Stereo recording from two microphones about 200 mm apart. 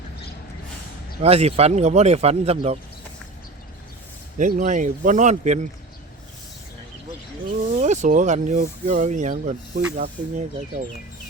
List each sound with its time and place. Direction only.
1.2 s speech: 30° right (ahead or behind)
4.4 s speech: 40° right (ahead or behind)
7.8 s speech: 35° right (ahead or behind)